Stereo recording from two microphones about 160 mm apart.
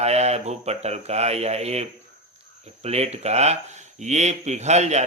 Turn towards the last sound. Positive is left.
turn(degrees=-45)  # may be behind; listen again after turning